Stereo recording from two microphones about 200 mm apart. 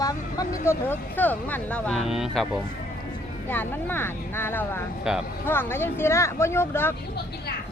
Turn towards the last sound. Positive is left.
turn(degrees=10)  # may be behind; listen again after turning